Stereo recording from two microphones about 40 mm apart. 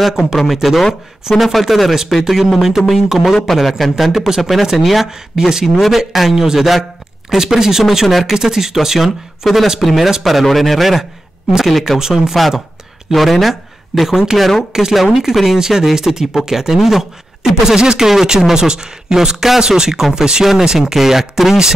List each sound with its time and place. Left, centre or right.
0.0 s speech: centre